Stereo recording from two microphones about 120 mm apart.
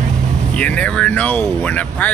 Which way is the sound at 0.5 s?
10° left (ahead or behind).